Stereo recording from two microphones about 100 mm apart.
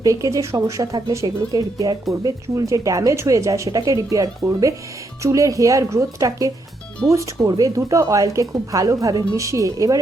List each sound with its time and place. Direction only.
0.0 s speech: 35° right (ahead or behind)